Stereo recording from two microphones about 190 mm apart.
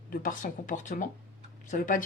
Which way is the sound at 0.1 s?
45° left (ahead or behind).